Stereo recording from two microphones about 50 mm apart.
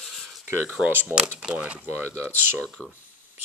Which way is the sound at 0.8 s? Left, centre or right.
Centre.